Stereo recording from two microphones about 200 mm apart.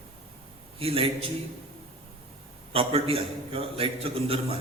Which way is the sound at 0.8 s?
30° right (ahead or behind).